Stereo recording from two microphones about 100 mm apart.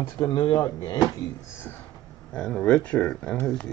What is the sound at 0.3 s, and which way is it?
Speech, 50° left (ahead or behind).